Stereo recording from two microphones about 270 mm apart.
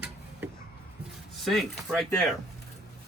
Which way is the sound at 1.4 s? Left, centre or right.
Centre.